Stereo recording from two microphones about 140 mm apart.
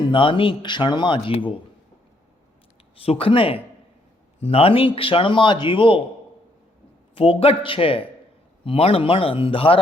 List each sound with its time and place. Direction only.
0.1 s speech: 40° left (ahead or behind)
2.9 s speech: 40° left (ahead or behind)
7.2 s speech: 40° left (ahead or behind)